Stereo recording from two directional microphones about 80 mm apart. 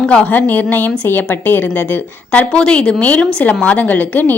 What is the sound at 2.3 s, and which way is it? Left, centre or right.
A woman's voice, centre.